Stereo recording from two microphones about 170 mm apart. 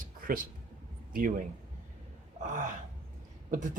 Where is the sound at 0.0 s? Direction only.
55° right (ahead or behind).